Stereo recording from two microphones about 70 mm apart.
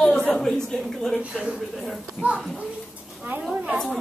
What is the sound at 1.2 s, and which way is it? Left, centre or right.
Speech, centre.